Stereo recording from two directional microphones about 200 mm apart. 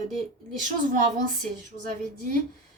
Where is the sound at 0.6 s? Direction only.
40° right (ahead or behind).